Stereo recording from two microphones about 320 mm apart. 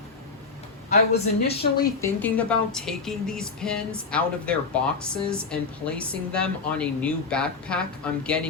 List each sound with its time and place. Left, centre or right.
0.9 s speech: left
2.0 s speech: centre